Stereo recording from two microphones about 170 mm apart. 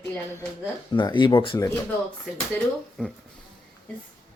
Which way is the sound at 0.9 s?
25° left (ahead or behind).